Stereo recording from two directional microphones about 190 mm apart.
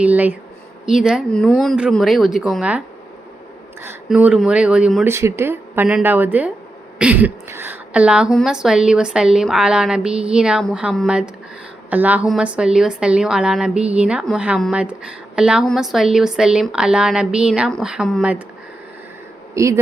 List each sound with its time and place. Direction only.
0.0 s a woman's voice: 10° right (ahead or behind)
5.0 s a woman's voice: 15° right (ahead or behind)
19.5 s speech: 15° right (ahead or behind)